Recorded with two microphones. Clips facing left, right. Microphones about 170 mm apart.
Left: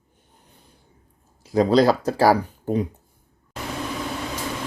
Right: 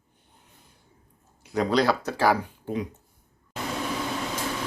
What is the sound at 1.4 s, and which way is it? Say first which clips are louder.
Speech: left 6 dB; 35° left (ahead or behind).